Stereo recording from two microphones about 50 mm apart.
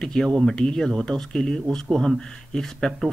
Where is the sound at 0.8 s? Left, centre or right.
Centre.